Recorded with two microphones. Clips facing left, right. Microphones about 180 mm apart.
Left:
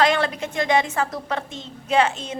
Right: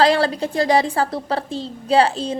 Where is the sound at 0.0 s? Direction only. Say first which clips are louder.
Right 4 dB; 35° right (ahead or behind).